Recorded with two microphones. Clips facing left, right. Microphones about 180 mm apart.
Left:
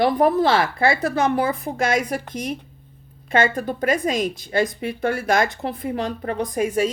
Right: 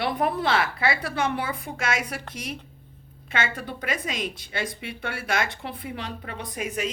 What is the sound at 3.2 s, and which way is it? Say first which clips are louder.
Speech: left 9 dB; 45° left (ahead or behind).